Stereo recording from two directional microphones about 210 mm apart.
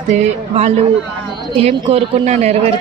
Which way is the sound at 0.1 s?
30° right (ahead or behind).